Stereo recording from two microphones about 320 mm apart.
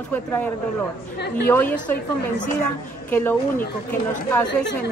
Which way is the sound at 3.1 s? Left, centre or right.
Centre.